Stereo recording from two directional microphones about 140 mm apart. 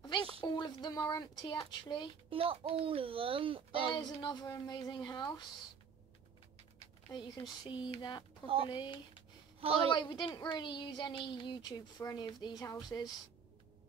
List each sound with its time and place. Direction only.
0.6 s speech: 30° left (ahead or behind)
2.2 s a child's voice: 40° right (ahead or behind)
3.9 s speech: 30° left (ahead or behind)
7.1 s speech: 30° left (ahead or behind)
9.6 s a woman's voice: 40° right (ahead or behind)
9.8 s speech: 30° left (ahead or behind)